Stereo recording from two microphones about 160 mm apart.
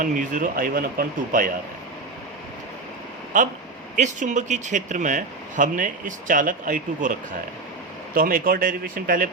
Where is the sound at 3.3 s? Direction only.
55° right (ahead or behind).